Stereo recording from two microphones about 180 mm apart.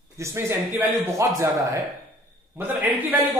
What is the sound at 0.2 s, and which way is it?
A man's voice, 15° right (ahead or behind).